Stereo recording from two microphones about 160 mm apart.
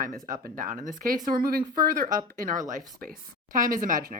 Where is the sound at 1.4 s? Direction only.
70° right (ahead or behind).